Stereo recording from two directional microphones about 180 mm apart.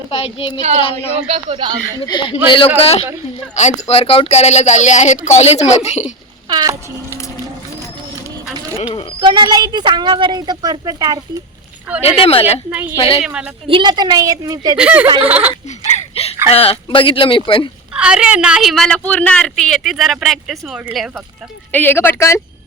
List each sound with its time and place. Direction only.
0.1 s speech: 30° left (ahead or behind)
1.3 s a woman's voice: 30° right (ahead or behind)
2.0 s speech: 25° left (ahead or behind)
6.5 s a sound: 20° right (ahead or behind)
8.8 s speech: 30° left (ahead or behind)
9.2 s a woman's voice: 25° right (ahead or behind)
12.0 s speech: 30° left (ahead or behind)
12.7 s a woman's voice: 10° right (ahead or behind)
13.7 s a woman's voice: 25° right (ahead or behind)
14.8 s speech: 10° right (ahead or behind)
16.1 s a sound: 35° left (ahead or behind)
16.5 s speech: 30° left (ahead or behind)
17.9 s a woman's voice: 5° right (ahead or behind)
21.7 s speech: 10° left (ahead or behind)